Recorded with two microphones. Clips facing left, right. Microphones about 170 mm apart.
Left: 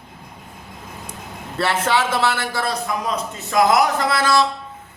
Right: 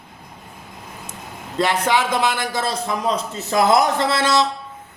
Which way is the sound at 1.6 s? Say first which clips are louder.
Right 1 dB; 15° right (ahead or behind).